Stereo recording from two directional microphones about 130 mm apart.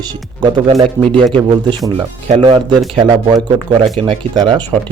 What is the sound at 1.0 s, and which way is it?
Speech, 20° right (ahead or behind).